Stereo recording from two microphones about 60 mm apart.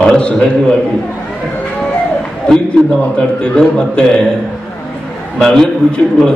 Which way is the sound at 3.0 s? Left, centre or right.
Centre.